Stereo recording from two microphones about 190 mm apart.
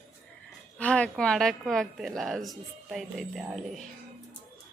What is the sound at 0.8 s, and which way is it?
A woman's voice, 5° left (ahead or behind).